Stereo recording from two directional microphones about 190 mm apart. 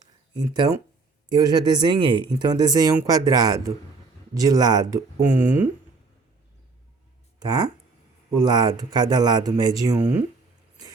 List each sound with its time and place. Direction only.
0.3 s speech: 20° right (ahead or behind)
7.3 s speech: 20° right (ahead or behind)